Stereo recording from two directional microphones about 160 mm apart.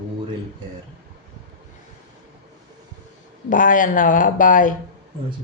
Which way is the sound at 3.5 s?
55° left (ahead or behind).